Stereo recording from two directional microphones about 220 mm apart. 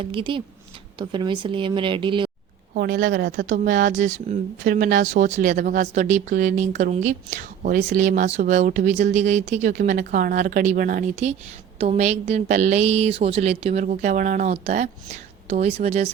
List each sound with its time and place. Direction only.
0.0 s a woman's voice: 25° right (ahead or behind)
2.7 s speech: 45° right (ahead or behind)
3.5 s a woman's voice: 35° right (ahead or behind)